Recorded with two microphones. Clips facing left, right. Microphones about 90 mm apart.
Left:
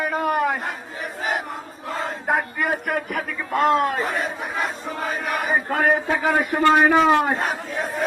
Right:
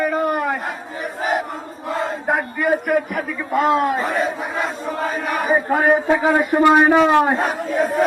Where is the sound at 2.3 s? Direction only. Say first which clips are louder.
Right 3 dB; centre (ahead or behind).